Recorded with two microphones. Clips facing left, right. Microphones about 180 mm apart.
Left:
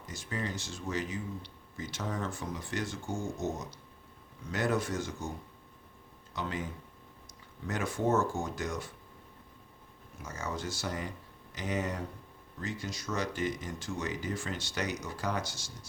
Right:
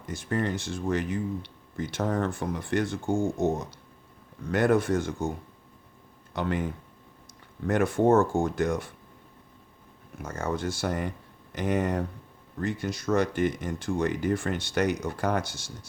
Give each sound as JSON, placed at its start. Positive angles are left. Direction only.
{"t": 0.0, "sound": "speech", "side_deg": -60}
{"t": 6.3, "sound": "speech", "side_deg": -60}
{"t": 7.7, "sound": "speech", "side_deg": -55}
{"t": 10.2, "sound": "speech", "side_deg": -55}